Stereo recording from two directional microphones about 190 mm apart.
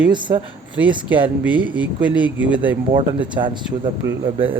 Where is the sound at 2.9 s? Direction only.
25° right (ahead or behind).